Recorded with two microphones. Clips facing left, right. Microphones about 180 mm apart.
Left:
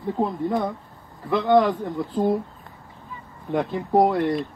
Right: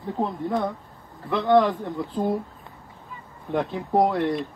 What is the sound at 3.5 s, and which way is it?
Speech, centre (ahead or behind).